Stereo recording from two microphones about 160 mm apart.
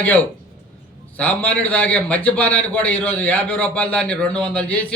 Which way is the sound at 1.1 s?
10° left (ahead or behind).